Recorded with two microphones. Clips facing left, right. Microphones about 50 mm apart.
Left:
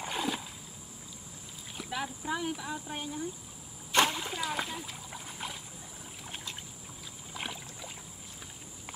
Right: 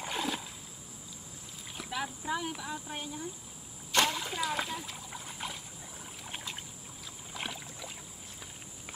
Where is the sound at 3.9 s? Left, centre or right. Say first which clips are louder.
Left 2 dB; left.